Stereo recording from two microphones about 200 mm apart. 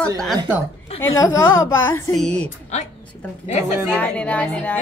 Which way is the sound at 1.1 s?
15° left (ahead or behind).